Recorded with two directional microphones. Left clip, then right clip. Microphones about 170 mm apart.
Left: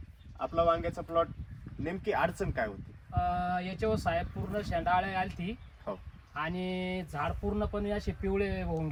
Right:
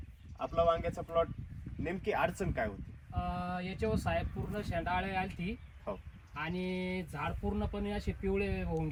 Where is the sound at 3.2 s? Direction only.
5° left (ahead or behind).